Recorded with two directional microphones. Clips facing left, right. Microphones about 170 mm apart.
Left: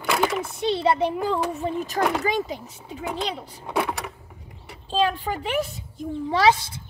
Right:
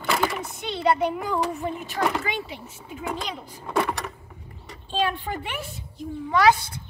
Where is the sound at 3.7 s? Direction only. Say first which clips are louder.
Right 1 dB; centre (ahead or behind).